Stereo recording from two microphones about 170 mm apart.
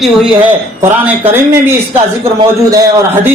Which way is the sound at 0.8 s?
10° right (ahead or behind).